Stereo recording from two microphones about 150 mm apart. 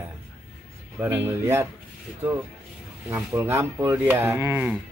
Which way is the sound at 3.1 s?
15° right (ahead or behind).